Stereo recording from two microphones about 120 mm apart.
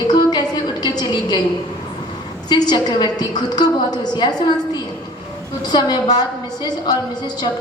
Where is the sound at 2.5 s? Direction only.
35° left (ahead or behind).